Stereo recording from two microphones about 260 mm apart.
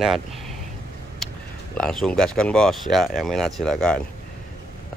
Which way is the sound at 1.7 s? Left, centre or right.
Centre.